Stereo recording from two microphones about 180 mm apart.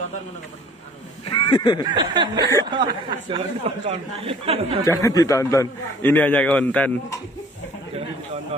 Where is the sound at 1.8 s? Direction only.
20° right (ahead or behind).